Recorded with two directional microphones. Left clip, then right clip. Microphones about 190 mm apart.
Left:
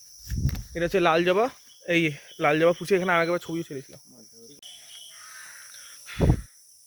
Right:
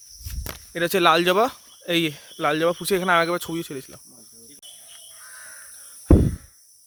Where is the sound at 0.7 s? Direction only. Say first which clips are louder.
Right 4 dB; 50° right (ahead or behind).